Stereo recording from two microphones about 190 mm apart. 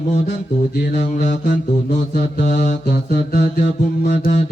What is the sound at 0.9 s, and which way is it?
Mantra, 40° left (ahead or behind).